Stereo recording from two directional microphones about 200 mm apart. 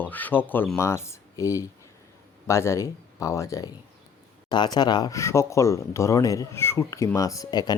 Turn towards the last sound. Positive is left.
turn(degrees=20)  # may be behind; listen again after turning